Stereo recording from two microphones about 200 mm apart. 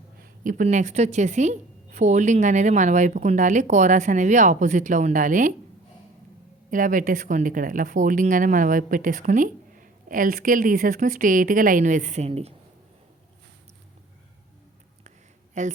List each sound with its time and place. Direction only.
0.2 s a woman's voice: 40° right (ahead or behind)
6.7 s a woman's voice: 40° right (ahead or behind)
15.6 s a woman's voice: 40° right (ahead or behind)